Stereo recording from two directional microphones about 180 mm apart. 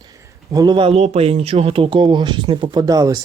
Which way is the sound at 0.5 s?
25° right (ahead or behind).